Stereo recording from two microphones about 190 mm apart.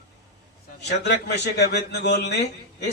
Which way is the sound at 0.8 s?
60° left (ahead or behind).